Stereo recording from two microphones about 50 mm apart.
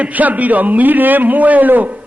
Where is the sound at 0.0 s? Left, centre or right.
Right.